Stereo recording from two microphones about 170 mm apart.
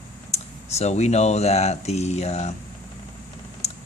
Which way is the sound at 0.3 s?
40° left (ahead or behind).